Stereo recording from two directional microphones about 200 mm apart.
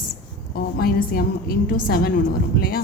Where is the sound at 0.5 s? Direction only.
50° left (ahead or behind).